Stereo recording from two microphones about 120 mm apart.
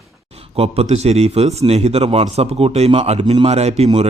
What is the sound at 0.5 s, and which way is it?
Speech, 55° right (ahead or behind).